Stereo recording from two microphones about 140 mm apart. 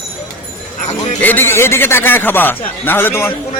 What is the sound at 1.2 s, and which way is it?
A man's voice, 15° left (ahead or behind).